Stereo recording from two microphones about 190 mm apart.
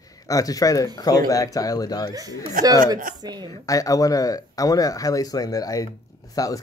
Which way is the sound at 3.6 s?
20° left (ahead or behind).